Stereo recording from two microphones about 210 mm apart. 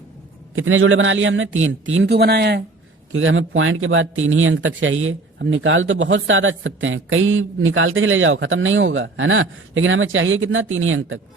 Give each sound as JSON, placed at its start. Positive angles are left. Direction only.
{"t": 0.5, "sound": "a man's voice", "side_deg": -75}
{"t": 3.1, "sound": "speech", "side_deg": -70}